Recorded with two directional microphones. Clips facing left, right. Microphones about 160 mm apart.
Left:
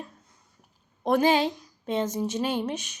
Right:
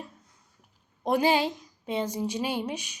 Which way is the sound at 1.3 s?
10° right (ahead or behind).